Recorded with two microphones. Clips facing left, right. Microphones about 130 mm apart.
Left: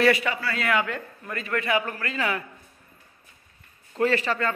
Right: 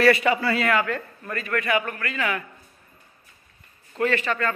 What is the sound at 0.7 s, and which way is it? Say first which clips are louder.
Speech: right 2 dB; 15° left (ahead or behind).